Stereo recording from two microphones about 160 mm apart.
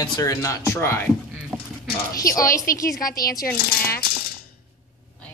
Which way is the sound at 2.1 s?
20° left (ahead or behind).